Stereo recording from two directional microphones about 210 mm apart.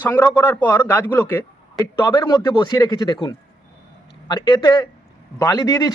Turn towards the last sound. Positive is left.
turn(degrees=20)  # may be behind; listen again after turning